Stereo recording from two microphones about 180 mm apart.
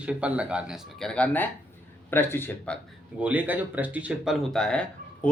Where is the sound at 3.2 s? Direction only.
10° right (ahead or behind).